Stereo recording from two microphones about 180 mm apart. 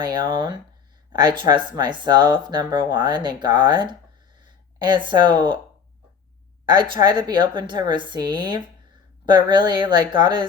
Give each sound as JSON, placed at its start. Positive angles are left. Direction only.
{"t": 0.0, "sound": "speech", "side_deg": -25}
{"t": 4.4, "sound": "a sound", "side_deg": -25}
{"t": 6.7, "sound": "speech", "side_deg": -25}